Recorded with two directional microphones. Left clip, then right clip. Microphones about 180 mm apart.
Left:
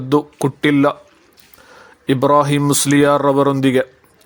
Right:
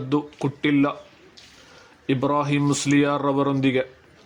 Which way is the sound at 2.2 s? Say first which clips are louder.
Left 9 dB; 35° left (ahead or behind).